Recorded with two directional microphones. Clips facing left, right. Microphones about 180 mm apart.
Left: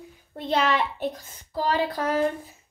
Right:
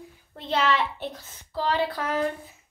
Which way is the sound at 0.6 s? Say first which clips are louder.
Right 2 dB; 45° left (ahead or behind).